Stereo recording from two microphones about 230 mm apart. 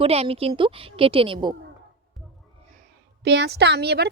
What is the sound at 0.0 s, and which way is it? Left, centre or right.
A woman's voice, right.